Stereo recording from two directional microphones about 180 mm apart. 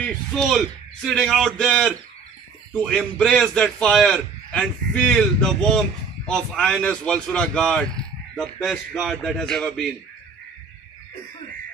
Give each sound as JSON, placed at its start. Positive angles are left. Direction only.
{"t": 0.0, "sound": "a man's voice", "side_deg": 0}